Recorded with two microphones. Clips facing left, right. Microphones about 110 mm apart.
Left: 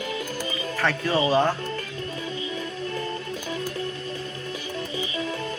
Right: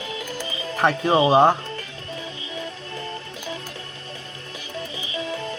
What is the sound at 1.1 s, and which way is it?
Speech, 20° right (ahead or behind).